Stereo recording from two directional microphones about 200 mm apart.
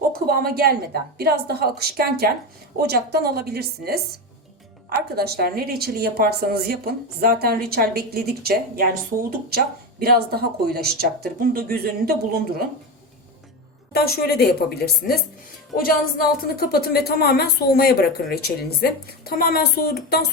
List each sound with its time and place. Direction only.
0.1 s a woman's voice: 50° right (ahead or behind)
13.9 s a woman's voice: 50° left (ahead or behind)
16.1 s a woman's voice: 50° left (ahead or behind)